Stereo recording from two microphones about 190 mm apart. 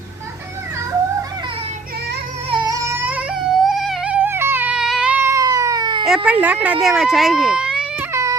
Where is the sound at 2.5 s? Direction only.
20° right (ahead or behind).